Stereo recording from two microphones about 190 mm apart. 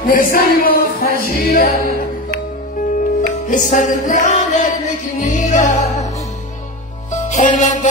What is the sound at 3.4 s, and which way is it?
Music, 40° left (ahead or behind).